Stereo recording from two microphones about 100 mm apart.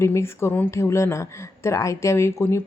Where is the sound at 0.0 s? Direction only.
25° left (ahead or behind).